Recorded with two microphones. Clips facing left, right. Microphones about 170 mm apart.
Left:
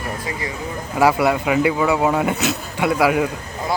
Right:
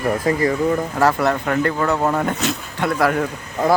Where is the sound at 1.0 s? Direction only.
10° left (ahead or behind).